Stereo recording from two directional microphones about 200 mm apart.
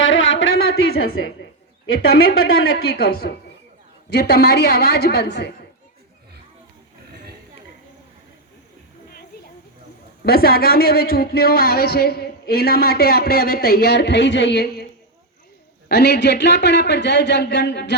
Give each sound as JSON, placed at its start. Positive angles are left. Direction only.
{"t": 0.0, "sound": "a sound", "side_deg": 70}
{"t": 0.5, "sound": "a woman's voice", "side_deg": 50}
{"t": 10.2, "sound": "a woman's voice", "side_deg": 50}
{"t": 15.9, "sound": "a man's voice", "side_deg": 55}